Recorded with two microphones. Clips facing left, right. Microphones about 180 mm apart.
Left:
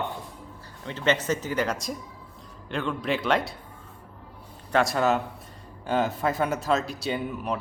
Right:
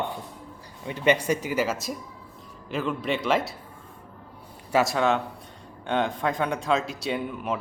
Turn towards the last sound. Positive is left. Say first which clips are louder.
# even
turn(degrees=0)  # may be behind; listen again after turning